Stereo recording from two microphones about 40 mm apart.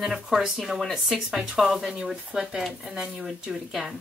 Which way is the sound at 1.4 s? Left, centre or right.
Centre.